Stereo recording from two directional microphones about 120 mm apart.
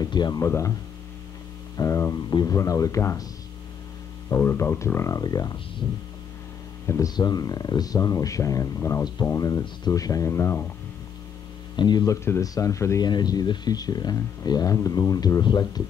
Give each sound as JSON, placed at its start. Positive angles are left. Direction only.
{"t": 0.0, "sound": "speech", "side_deg": 35}
{"t": 0.4, "sound": "speech", "side_deg": 25}
{"t": 1.8, "sound": "a sound", "side_deg": 25}
{"t": 2.2, "sound": "speech", "side_deg": 35}
{"t": 4.3, "sound": "speech", "side_deg": 20}
{"t": 5.2, "sound": "speech", "side_deg": 35}
{"t": 6.9, "sound": "speech", "side_deg": 30}
{"t": 11.7, "sound": "speech", "side_deg": 35}